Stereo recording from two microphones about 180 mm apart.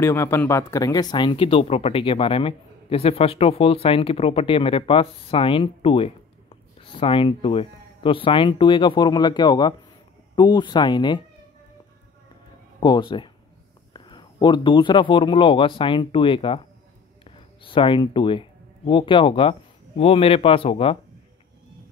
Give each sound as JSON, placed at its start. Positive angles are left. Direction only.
{"t": 0.0, "sound": "speech", "side_deg": 15}
{"t": 12.8, "sound": "speech", "side_deg": 25}